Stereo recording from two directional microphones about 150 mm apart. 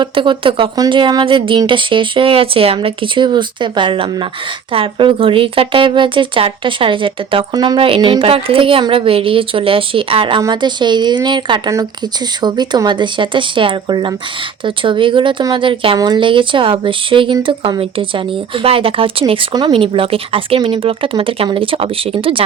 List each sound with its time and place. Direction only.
0.0 s speech: 35° right (ahead or behind)